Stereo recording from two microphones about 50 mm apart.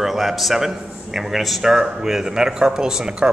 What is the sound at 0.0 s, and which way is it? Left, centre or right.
A man's voice, centre.